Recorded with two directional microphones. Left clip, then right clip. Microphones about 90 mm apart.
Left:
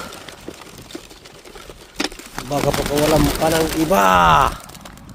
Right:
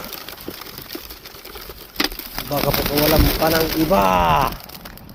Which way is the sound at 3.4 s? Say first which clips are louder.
Even; 75° left (ahead or behind).